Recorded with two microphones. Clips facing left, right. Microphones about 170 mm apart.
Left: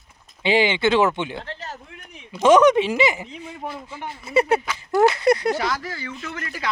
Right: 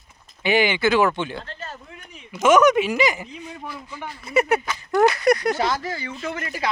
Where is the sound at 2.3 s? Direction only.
30° left (ahead or behind).